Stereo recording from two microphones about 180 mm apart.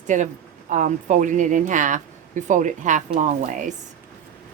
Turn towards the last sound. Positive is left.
turn(degrees=-45)  # may be behind; listen again after turning